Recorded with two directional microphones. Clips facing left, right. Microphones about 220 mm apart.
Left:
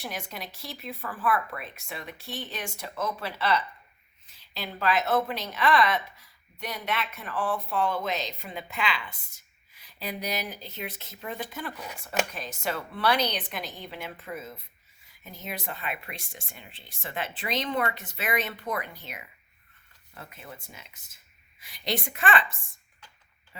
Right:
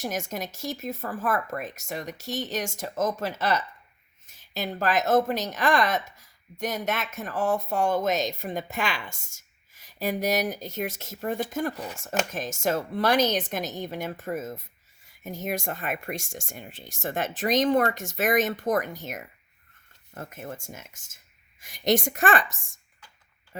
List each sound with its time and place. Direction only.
0.0 s a woman's voice: 45° right (ahead or behind)